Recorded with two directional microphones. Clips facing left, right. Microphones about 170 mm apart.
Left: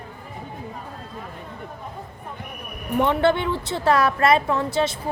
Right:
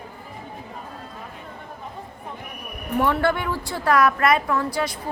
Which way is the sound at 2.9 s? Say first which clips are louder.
Left 2 dB; 20° left (ahead or behind).